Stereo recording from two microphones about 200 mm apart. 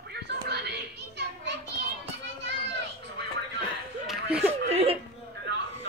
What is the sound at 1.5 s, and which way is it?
Children playing, 60° right (ahead or behind).